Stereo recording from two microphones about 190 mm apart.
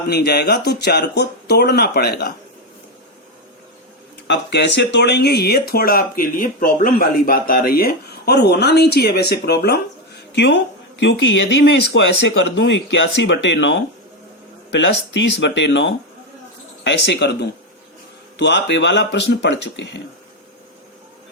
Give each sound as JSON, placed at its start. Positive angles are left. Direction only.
{"t": 0.1, "sound": "speech", "side_deg": 60}
{"t": 4.3, "sound": "speech", "side_deg": 65}
{"t": 18.3, "sound": "speech", "side_deg": 65}